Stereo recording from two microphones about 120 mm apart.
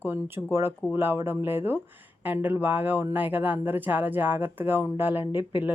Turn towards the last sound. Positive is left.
turn(degrees=-15)  # may be behind; listen again after turning